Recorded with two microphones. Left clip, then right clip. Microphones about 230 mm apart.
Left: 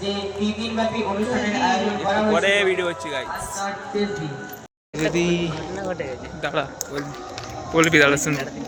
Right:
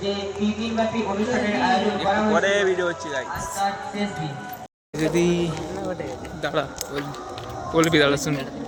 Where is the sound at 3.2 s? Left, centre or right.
Left.